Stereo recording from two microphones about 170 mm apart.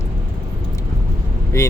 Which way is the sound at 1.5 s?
20° left (ahead or behind).